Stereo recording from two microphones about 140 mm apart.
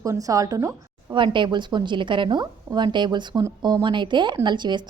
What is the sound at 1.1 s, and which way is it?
A woman's voice, 35° right (ahead or behind).